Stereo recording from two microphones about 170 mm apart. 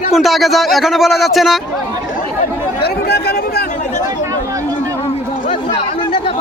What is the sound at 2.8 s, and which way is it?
Chatter, 65° left (ahead or behind).